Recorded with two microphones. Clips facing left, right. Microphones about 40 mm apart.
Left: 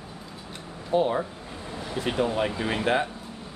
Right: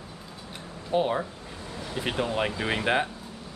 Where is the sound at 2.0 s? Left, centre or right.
Centre.